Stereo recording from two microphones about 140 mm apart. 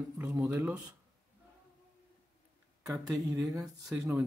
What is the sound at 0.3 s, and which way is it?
Speech, 25° right (ahead or behind).